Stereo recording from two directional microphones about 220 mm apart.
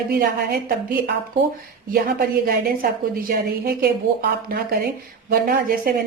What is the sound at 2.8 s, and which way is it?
A woman's voice, 40° right (ahead or behind).